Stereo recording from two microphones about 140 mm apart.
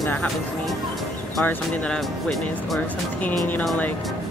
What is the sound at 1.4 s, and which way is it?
Speech, 15° left (ahead or behind).